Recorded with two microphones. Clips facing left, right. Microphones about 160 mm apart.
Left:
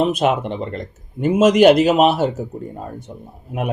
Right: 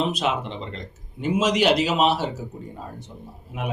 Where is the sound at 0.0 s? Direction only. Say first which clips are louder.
Left 7 dB; 50° left (ahead or behind).